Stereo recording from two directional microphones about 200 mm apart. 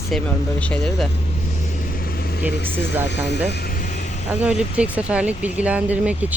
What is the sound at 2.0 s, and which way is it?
Vehicle, 50° left (ahead or behind).